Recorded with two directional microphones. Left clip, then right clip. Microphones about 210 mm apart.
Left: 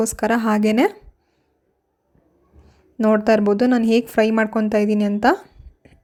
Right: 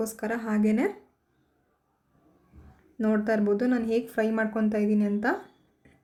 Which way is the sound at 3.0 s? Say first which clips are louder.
Left 10 dB; 35° left (ahead or behind).